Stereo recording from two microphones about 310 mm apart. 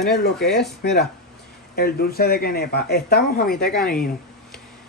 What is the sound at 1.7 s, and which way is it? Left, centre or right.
Speech, left.